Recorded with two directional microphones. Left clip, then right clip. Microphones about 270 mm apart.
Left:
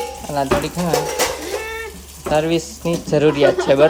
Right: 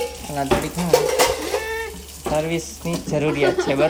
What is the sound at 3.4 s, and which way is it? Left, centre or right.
Speech, centre.